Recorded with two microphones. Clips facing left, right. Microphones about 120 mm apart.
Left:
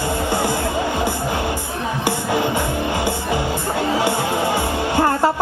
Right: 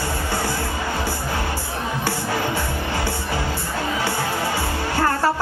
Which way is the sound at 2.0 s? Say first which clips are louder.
Left 5 dB; 20° left (ahead or behind).